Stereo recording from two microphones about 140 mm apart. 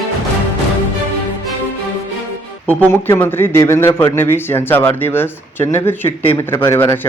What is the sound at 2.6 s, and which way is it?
A man's voice, 15° left (ahead or behind).